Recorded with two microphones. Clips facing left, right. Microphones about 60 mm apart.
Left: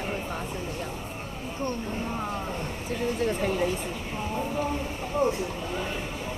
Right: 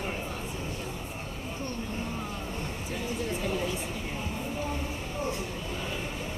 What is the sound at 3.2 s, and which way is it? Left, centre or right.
Speech, left.